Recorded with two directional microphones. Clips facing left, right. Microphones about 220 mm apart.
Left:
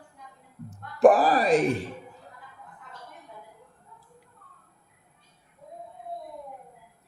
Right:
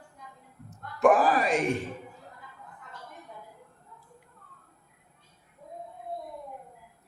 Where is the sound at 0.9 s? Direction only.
35° left (ahead or behind).